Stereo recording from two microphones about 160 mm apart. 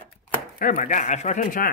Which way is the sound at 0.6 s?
55° left (ahead or behind).